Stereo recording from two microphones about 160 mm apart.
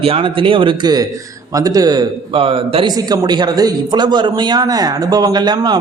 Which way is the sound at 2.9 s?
25° right (ahead or behind).